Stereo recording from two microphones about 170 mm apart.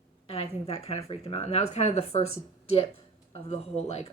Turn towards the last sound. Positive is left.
turn(degrees=40)  # may be behind; listen again after turning